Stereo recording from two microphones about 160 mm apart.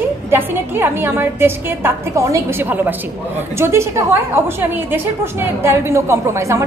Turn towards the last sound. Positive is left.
turn(degrees=-15)  # may be behind; listen again after turning